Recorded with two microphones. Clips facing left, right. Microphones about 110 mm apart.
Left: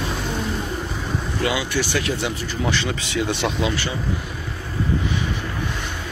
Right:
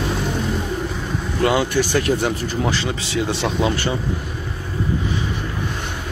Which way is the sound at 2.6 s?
30° right (ahead or behind).